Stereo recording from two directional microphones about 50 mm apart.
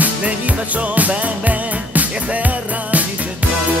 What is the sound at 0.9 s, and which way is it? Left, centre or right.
Music, right.